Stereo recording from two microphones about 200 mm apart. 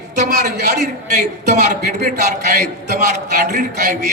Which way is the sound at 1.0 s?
35° right (ahead or behind).